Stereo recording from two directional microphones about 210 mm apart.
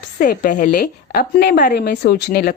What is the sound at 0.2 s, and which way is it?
Speech, 40° left (ahead or behind).